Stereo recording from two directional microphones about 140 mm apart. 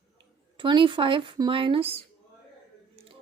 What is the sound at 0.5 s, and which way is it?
Speech, 35° right (ahead or behind).